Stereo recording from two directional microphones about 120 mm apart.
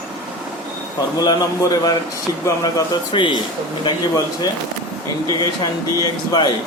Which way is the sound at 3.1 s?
45° left (ahead or behind).